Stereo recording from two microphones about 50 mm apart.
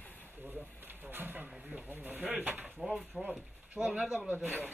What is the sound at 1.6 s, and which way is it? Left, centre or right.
Snake, right.